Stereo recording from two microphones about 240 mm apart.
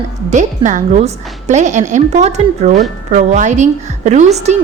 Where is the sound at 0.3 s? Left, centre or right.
Right.